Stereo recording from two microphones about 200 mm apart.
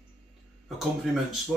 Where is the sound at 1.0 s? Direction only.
Centre (ahead or behind).